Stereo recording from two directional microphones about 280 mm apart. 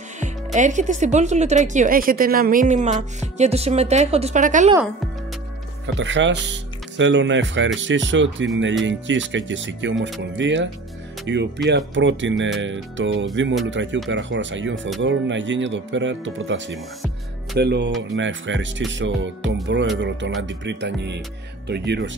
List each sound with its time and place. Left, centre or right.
0.2 s speech: right
5.9 s speech: right